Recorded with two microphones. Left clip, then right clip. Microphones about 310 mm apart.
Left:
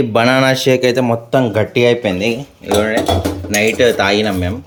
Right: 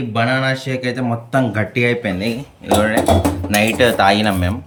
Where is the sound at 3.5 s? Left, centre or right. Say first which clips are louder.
Left 3 dB; centre.